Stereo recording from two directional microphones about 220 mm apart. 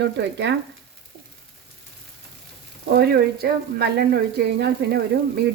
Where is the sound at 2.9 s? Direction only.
45° right (ahead or behind).